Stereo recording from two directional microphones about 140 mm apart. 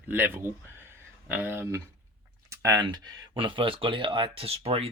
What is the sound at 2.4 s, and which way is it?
Speech, 20° right (ahead or behind).